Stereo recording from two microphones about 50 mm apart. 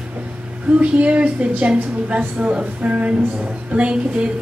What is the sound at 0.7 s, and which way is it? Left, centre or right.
A woman's voice, right.